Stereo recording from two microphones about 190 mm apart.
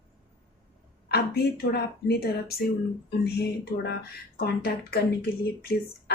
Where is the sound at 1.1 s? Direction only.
55° left (ahead or behind).